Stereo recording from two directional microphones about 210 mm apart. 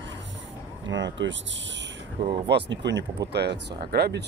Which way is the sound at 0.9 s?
60° right (ahead or behind).